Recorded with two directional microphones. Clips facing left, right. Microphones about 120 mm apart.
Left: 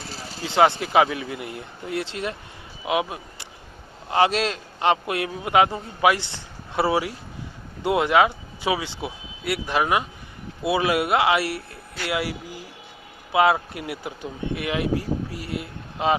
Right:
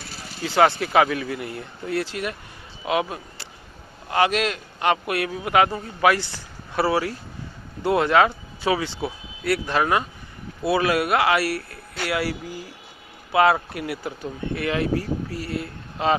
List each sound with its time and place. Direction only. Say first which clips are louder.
0.4 s a man's voice: even; 20° left (ahead or behind)
4.1 s a man's voice: left 1 dB; 30° left (ahead or behind)